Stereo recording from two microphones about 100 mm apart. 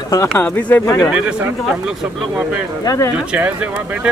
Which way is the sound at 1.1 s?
10° right (ahead or behind).